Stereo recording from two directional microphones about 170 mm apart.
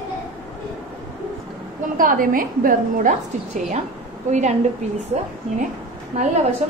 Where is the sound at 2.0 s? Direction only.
55° right (ahead or behind).